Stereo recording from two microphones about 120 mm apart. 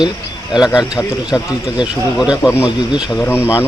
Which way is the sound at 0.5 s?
5° right (ahead or behind).